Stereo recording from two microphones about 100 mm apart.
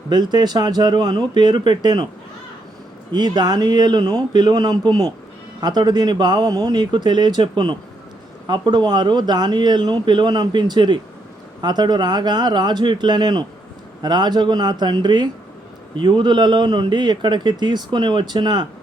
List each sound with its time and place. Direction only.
0.1 s a man's voice: 45° right (ahead or behind)
3.1 s a man's voice: 45° right (ahead or behind)